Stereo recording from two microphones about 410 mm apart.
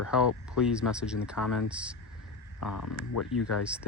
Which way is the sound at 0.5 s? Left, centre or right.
Centre.